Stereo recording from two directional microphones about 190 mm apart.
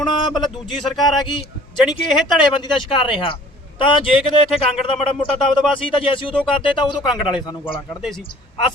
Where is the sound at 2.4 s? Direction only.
25° left (ahead or behind).